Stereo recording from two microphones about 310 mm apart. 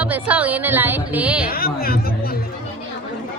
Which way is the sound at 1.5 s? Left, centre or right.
Left.